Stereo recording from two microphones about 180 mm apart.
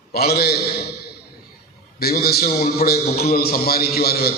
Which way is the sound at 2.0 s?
60° left (ahead or behind).